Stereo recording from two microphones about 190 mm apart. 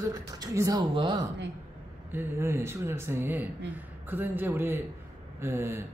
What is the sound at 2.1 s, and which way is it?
A woman's voice, 10° right (ahead or behind).